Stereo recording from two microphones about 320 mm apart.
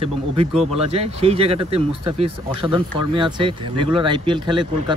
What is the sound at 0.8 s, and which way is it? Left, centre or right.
Speech, centre.